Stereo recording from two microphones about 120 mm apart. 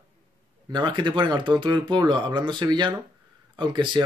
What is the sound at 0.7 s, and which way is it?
Speech, 40° right (ahead or behind).